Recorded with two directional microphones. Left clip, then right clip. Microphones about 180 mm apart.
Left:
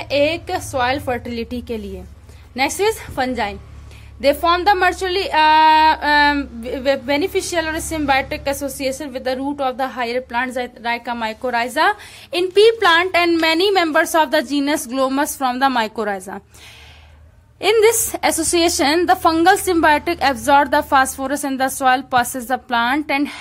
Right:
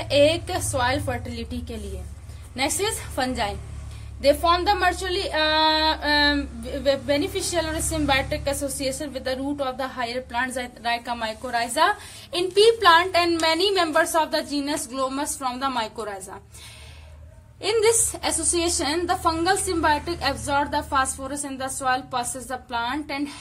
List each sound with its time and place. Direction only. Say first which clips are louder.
0.0 s a woman's voice: left 1 dB; 20° left (ahead or behind)
4.2 s speech: left 4 dB; 40° left (ahead or behind)
17.6 s a woman's voice: left 7 dB; 40° left (ahead or behind)